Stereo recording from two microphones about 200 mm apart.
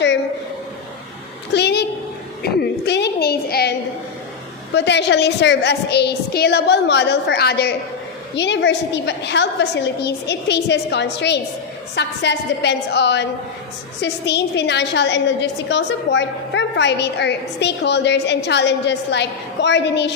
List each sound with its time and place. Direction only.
1.5 s a woman's voice: 55° left (ahead or behind)